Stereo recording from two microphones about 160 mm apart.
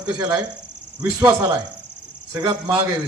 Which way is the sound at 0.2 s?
25° right (ahead or behind).